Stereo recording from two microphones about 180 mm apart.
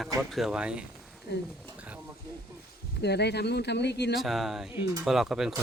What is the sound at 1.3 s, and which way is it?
Speech, 65° left (ahead or behind).